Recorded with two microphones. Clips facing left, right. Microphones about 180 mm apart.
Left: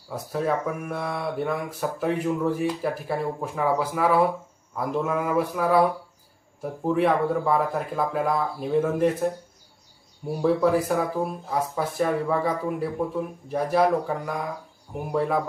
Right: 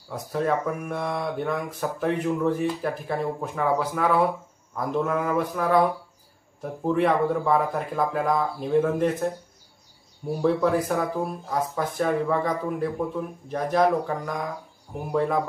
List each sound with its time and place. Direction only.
0.1 s speech: 5° left (ahead or behind)
4.8 s mantra: 5° left (ahead or behind)
6.6 s speech: centre (ahead or behind)
10.4 s speech: 5° left (ahead or behind)